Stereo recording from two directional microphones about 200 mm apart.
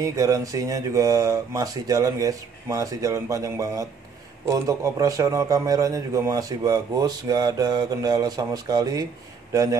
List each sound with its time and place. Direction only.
0.0 s a man's voice: 15° right (ahead or behind)